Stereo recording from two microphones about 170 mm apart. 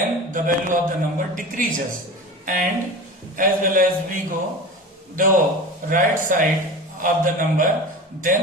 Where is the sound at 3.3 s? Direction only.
50° right (ahead or behind).